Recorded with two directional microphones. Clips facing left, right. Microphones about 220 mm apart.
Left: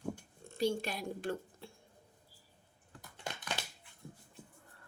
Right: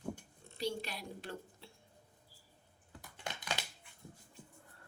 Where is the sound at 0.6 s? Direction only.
50° left (ahead or behind).